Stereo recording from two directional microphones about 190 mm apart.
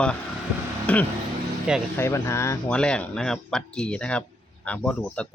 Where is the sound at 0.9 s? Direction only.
5° left (ahead or behind).